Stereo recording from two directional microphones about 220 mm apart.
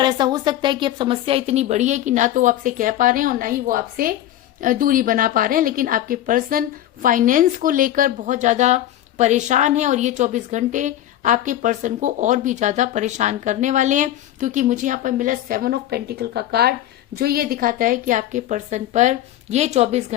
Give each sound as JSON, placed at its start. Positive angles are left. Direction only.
{"t": 0.0, "sound": "a woman's voice", "side_deg": -20}